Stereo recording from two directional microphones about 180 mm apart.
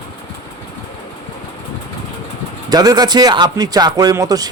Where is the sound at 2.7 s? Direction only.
20° right (ahead or behind).